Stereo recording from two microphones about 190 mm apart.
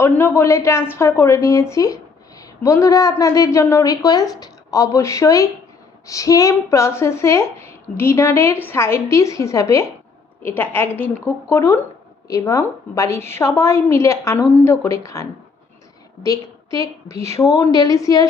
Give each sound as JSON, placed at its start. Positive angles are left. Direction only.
{"t": 0.0, "sound": "a woman's voice", "side_deg": 10}